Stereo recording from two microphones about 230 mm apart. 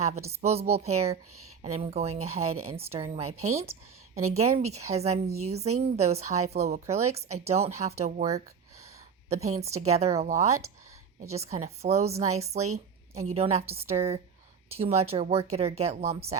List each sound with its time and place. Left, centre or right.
0.0 s speech: right